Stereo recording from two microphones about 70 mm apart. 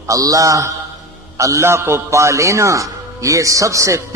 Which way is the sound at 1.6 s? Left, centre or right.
Right.